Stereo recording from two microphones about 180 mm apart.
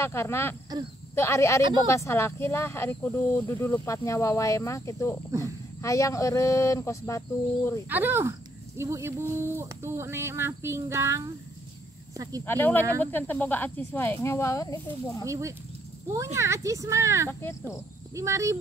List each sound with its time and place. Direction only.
0.0 s speech: 15° left (ahead or behind)
1.6 s speech: 25° right (ahead or behind)
1.9 s speech: 15° left (ahead or behind)
5.3 s speech: 15° right (ahead or behind)
5.8 s speech: 15° left (ahead or behind)
7.9 s speech: 10° right (ahead or behind)
12.4 s speech: 10° left (ahead or behind)
15.2 s speech: 15° right (ahead or behind)
17.3 s speech: 15° left (ahead or behind)
18.1 s speech: 15° right (ahead or behind)